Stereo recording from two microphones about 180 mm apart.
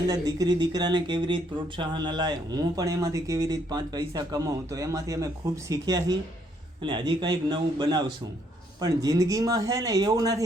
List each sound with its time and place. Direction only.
0.1 s speech: 20° right (ahead or behind)